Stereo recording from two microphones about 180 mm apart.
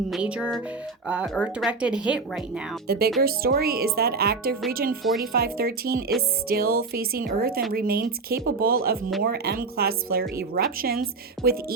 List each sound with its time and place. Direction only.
0.1 s speech: 5° right (ahead or behind)
2.8 s speech: 60° right (ahead or behind)